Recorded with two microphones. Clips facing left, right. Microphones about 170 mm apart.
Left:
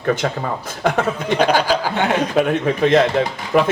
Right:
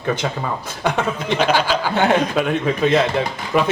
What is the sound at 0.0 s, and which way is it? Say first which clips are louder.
Speech: left 2 dB; 50° left (ahead or behind).